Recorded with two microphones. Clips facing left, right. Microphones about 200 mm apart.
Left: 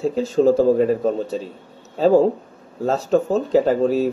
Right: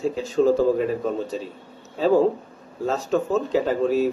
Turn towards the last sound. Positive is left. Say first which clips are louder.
# left 3 dB
turn(degrees=40)  # may be behind; listen again after turning